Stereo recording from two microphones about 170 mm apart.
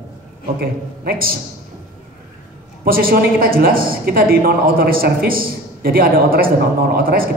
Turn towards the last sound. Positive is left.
turn(degrees=-60)  # may be behind; listen again after turning